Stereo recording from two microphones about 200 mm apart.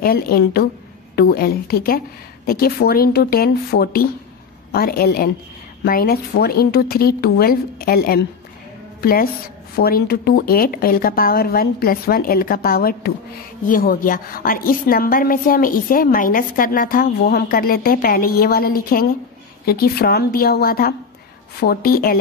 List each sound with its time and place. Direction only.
0.0 s a woman's voice: 50° left (ahead or behind)